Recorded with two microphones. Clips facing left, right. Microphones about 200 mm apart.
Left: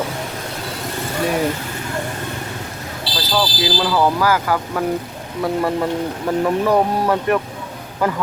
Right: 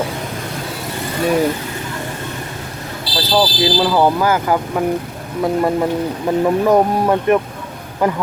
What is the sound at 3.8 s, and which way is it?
Speech, 25° right (ahead or behind).